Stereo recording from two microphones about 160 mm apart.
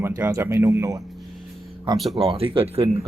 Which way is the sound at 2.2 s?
35° right (ahead or behind).